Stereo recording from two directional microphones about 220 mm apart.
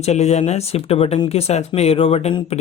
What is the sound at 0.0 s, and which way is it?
Speech, 30° left (ahead or behind).